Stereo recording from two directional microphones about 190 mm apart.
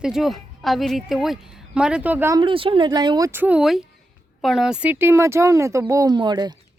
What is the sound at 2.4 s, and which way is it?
Speech, 25° right (ahead or behind).